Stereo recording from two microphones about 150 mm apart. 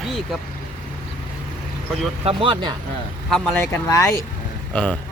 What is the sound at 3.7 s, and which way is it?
Speech, 20° left (ahead or behind).